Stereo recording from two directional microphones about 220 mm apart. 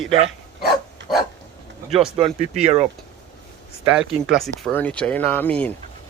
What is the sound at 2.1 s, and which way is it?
Speech, 25° right (ahead or behind).